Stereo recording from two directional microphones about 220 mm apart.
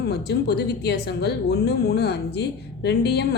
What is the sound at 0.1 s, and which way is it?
Speech, 50° left (ahead or behind).